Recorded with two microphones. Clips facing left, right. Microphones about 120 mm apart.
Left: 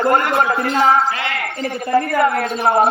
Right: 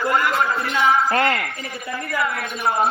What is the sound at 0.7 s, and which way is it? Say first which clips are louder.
Speech: left 4 dB; 40° left (ahead or behind).